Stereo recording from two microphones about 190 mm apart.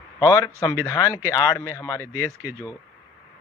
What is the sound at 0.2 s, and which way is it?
Speech, 15° left (ahead or behind).